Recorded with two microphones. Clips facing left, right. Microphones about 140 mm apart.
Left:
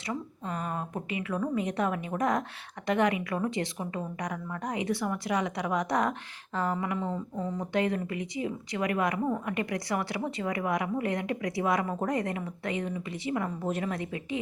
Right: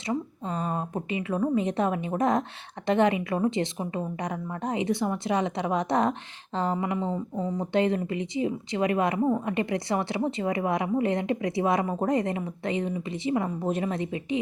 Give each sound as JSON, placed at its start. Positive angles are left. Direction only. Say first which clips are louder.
{"t": 0.1, "sound": "a woman's voice", "louder": "right 5 dB", "side_deg": -25}